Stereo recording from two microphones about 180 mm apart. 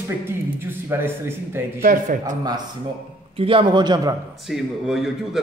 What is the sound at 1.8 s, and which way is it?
Speech, 50° right (ahead or behind).